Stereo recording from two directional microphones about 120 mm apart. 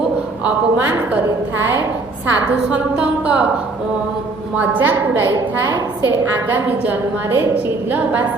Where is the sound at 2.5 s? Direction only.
10° right (ahead or behind).